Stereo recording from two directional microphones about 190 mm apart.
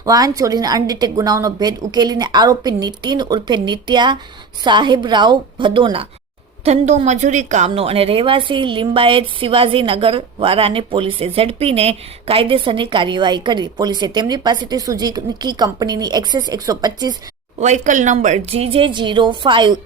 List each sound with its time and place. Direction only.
0.0 s a woman's voice: 20° right (ahead or behind)
17.6 s a woman's voice: 40° right (ahead or behind)